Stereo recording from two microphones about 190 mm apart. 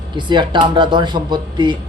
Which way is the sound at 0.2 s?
25° right (ahead or behind).